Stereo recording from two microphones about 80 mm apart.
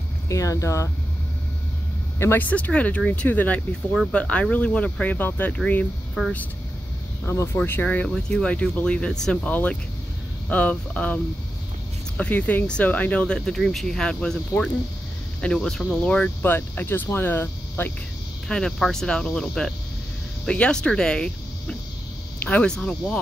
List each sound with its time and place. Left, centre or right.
0.3 s speech: left
2.1 s speech: left
2.4 s speech: centre
7.6 s speech: left; by 9.5 s centre
9.5 s speech: centre
12.2 s speech: centre
15.4 s speech: centre
16.4 s speech: left
18.5 s speech: centre